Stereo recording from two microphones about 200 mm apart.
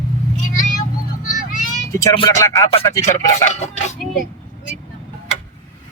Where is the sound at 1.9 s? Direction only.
20° left (ahead or behind).